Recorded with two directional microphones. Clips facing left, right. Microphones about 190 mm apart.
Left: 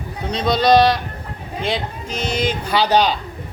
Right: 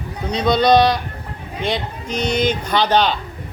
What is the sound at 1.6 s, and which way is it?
Speech, 30° left (ahead or behind).